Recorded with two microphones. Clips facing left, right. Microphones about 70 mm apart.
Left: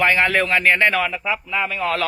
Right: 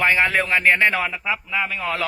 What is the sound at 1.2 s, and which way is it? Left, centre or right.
Speech, centre.